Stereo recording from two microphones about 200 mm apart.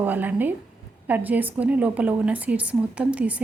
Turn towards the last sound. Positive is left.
turn(degrees=-5)  # may be behind; listen again after turning